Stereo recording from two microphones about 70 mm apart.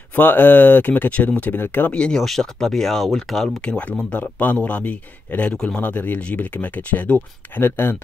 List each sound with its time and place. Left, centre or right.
0.1 s speech: left
2.0 s speech: centre
3.6 s speech: centre; by 8.0 s left